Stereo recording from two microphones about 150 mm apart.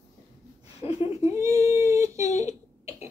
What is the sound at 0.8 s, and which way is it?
Speech, 40° left (ahead or behind).